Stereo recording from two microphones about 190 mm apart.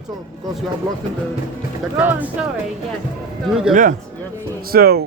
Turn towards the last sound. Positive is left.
turn(degrees=-55)  # may be behind; listen again after turning